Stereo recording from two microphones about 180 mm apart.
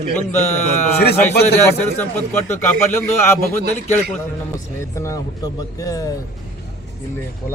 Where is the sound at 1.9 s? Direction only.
10° left (ahead or behind).